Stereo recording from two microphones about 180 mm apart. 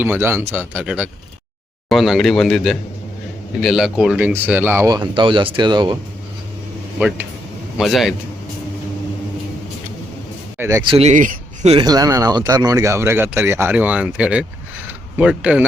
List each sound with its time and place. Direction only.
0.0 s a man's voice: 10° right (ahead or behind)
4.9 s speech: 25° right (ahead or behind)
7.8 s a man's voice: centre (ahead or behind)
10.6 s speech: 15° right (ahead or behind)
10.8 s speech: 30° right (ahead or behind)
11.8 s speech: 20° right (ahead or behind); by 14.4 s 5° right (ahead or behind)
14.8 s mechanisms: 5° right (ahead or behind)